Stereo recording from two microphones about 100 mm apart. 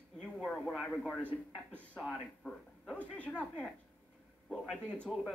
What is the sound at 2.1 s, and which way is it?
A man's voice, 10° left (ahead or behind).